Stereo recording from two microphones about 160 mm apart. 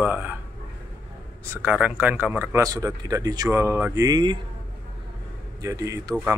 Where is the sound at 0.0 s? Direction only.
10° right (ahead or behind).